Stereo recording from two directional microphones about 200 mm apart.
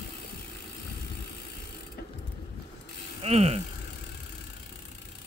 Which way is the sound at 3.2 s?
30° right (ahead or behind).